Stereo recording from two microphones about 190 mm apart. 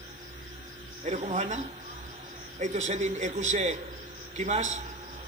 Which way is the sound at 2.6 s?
40° right (ahead or behind).